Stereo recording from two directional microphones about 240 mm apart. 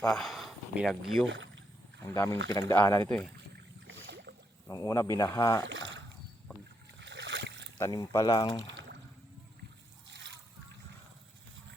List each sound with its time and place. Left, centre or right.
0.0 s speech: centre
1.3 s rowboat: right
2.0 s speech: centre
3.8 s rowboat: right
4.7 s speech: centre
5.6 s a sound: right
7.0 s a sound: right
7.8 s speech: centre
8.6 s a sound: right
10.1 s splash: right